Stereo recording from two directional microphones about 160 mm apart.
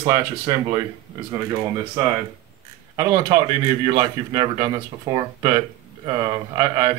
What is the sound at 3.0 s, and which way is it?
A man's voice, 20° right (ahead or behind).